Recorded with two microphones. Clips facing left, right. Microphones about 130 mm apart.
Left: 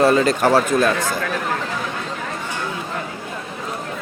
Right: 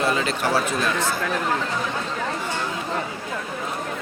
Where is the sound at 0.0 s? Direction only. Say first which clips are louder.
Left 8 dB; 40° left (ahead or behind).